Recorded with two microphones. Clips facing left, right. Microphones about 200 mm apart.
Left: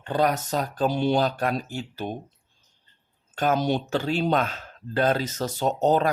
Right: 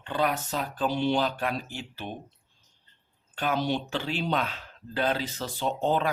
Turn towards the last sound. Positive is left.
turn(degrees=40)  # may be behind; listen again after turning